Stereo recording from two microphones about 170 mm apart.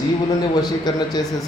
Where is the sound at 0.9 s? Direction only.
25° left (ahead or behind).